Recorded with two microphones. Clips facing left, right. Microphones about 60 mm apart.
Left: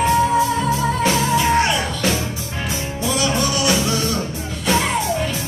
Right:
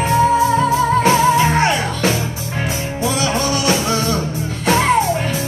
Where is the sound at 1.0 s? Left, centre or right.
Right.